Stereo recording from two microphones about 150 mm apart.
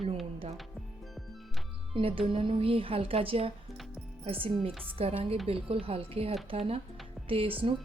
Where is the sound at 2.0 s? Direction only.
40° right (ahead or behind).